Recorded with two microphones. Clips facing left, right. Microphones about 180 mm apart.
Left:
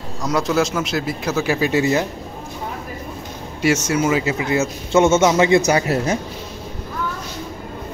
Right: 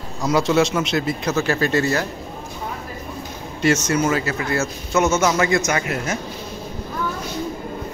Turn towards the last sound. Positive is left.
turn(degrees=35)  # may be behind; listen again after turning